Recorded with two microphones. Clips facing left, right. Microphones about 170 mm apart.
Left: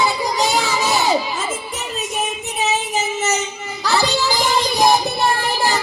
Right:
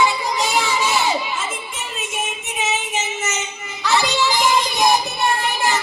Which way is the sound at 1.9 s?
35° left (ahead or behind).